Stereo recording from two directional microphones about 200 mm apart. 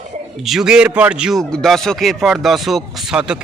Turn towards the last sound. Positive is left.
turn(degrees=-5)  # may be behind; listen again after turning